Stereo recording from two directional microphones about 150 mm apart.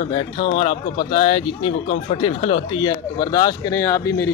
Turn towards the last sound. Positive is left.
turn(degrees=20)  # may be behind; listen again after turning